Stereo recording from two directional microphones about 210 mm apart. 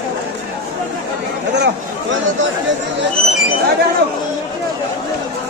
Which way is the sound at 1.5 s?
55° right (ahead or behind).